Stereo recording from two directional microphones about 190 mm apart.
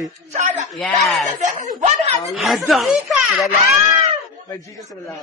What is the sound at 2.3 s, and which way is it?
Speech, centre (ahead or behind).